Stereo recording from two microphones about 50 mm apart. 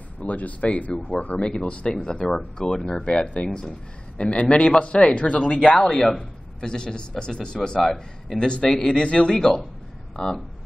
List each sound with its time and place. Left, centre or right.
0.2 s speech: left
2.2 s a man's voice: centre